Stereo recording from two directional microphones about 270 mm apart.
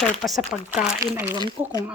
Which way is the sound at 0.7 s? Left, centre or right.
Left.